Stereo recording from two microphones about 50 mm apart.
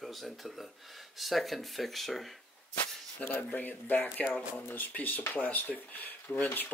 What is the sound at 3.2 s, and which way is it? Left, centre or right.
Speech, left.